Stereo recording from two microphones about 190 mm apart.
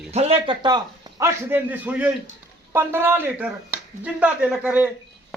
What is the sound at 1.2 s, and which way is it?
A man's voice, 10° right (ahead or behind).